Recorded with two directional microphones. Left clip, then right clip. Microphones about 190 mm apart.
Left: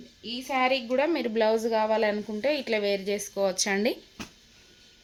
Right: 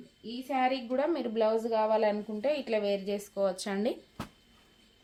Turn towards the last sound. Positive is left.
turn(degrees=40)  # may be behind; listen again after turning